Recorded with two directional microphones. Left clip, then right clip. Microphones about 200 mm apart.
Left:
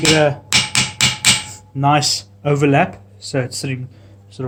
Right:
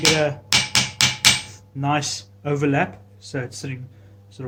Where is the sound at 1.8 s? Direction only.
35° left (ahead or behind).